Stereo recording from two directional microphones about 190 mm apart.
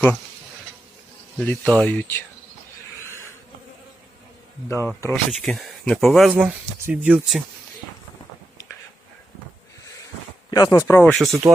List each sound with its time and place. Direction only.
1.4 s speech: 5° left (ahead or behind)
3.0 s a sound: 15° left (ahead or behind)
4.9 s speech: 15° left (ahead or behind)
5.3 s speech: centre (ahead or behind)
10.5 s speech: 20° left (ahead or behind)
11.1 s speech: centre (ahead or behind)